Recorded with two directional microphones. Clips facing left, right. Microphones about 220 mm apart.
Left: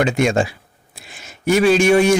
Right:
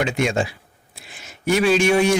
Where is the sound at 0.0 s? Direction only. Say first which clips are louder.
Left 4 dB; 45° left (ahead or behind).